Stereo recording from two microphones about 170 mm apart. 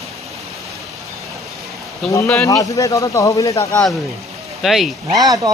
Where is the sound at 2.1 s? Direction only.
10° left (ahead or behind).